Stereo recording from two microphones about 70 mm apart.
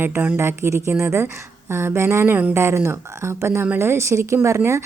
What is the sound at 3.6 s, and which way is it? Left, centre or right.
Speech, right.